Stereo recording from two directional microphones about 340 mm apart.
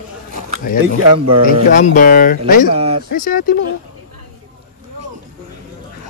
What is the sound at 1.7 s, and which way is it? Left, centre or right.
Speech, left.